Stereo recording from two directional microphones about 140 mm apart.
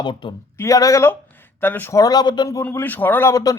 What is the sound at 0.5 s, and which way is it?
A man's voice, 20° left (ahead or behind).